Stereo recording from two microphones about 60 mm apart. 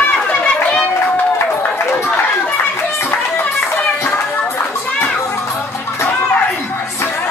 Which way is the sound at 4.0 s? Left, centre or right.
Left.